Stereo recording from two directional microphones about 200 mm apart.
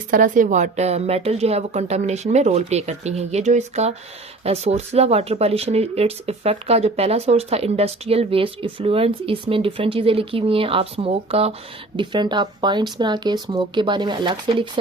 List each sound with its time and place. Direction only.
0.1 s a woman's voice: 40° right (ahead or behind); by 14.7 s 25° right (ahead or behind)